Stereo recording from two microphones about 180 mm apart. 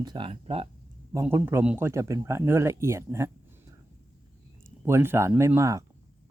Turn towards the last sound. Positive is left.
turn(degrees=-15)  # may be behind; listen again after turning